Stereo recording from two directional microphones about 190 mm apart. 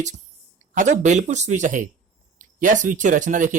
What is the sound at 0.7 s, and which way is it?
Speech, 40° right (ahead or behind).